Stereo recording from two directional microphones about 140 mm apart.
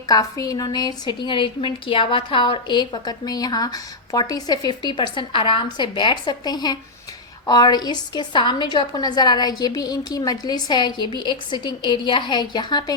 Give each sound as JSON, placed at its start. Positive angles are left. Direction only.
{"t": 0.1, "sound": "a woman's voice", "side_deg": 25}